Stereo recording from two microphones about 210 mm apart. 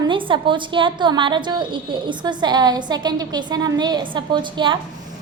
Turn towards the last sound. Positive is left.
turn(degrees=-20)  # may be behind; listen again after turning